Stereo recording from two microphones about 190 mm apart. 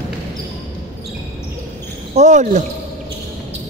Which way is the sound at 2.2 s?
40° right (ahead or behind).